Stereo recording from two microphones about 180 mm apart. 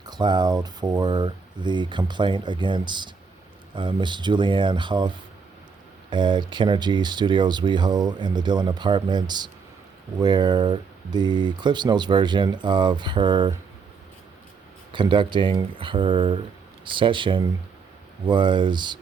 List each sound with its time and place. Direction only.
0.0 s speech: 25° right (ahead or behind)
14.9 s speech: 25° right (ahead or behind)